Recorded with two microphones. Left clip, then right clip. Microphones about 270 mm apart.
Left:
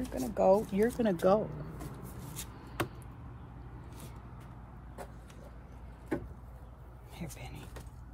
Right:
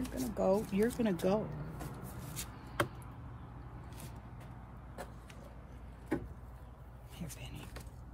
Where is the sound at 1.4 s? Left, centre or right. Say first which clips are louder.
Left 2 dB; centre.